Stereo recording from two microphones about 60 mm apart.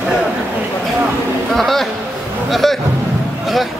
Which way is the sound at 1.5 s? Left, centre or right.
Centre.